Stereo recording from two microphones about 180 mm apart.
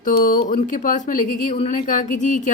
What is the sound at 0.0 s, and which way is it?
Speech, 50° left (ahead or behind).